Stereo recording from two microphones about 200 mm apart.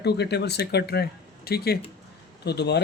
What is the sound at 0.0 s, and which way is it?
Speech, 55° left (ahead or behind).